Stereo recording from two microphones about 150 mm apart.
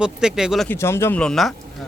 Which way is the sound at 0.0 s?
5° right (ahead or behind).